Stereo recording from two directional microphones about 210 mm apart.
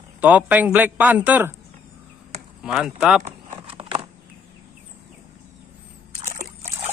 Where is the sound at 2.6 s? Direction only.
Centre (ahead or behind).